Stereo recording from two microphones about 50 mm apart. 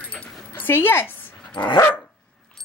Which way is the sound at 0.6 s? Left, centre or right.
Left.